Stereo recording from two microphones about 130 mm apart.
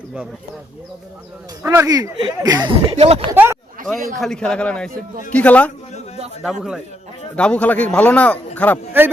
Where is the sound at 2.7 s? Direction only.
50° right (ahead or behind).